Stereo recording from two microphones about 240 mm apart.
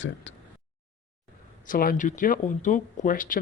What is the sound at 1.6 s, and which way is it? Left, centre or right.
Speech, left.